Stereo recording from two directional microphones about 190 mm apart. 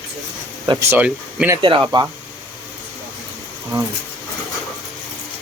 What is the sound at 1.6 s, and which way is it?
Speech, 25° right (ahead or behind).